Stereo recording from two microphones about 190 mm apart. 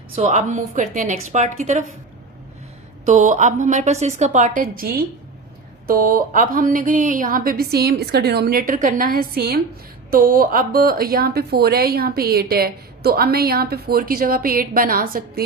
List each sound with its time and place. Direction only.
0.2 s a woman's voice: 35° right (ahead or behind)
3.1 s a woman's voice: 40° right (ahead or behind)